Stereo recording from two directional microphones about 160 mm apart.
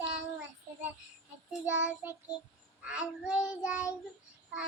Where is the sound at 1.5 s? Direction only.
10° right (ahead or behind).